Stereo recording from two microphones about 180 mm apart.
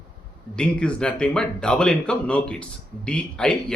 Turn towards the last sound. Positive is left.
turn(degrees=5)  # may be behind; listen again after turning